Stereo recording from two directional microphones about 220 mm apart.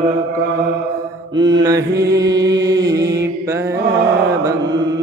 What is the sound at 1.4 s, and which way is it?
Mantra, 20° right (ahead or behind).